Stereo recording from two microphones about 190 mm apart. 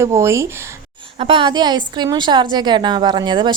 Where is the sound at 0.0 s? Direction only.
15° right (ahead or behind).